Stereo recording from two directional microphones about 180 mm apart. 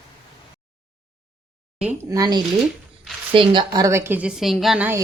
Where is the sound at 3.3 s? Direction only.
30° right (ahead or behind); by 5.0 s 5° right (ahead or behind).